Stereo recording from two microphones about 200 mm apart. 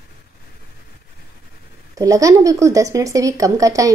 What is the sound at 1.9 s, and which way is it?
Speech, 15° right (ahead or behind).